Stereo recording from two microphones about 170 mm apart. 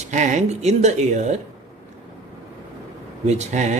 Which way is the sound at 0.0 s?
45° right (ahead or behind).